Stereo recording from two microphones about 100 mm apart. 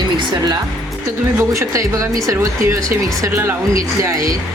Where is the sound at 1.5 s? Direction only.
30° right (ahead or behind).